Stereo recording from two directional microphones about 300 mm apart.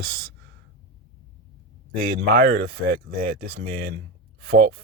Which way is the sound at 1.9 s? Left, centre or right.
Right.